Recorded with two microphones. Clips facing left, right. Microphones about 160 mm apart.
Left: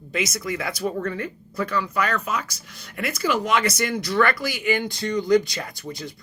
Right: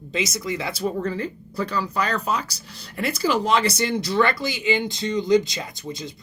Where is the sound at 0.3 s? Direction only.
25° right (ahead or behind).